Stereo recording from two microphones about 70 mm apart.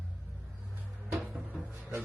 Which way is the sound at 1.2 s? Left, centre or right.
Centre.